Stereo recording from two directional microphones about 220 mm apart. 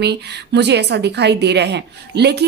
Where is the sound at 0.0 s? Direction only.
50° right (ahead or behind).